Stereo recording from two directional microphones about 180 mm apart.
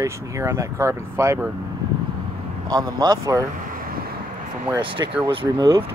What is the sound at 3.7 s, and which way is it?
Boat, 55° right (ahead or behind).